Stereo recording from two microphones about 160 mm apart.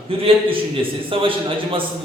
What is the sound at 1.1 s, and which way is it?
Speech, 35° right (ahead or behind).